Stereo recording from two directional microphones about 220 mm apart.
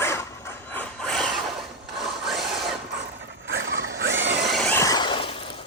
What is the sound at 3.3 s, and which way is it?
Zipper, 55° right (ahead or behind).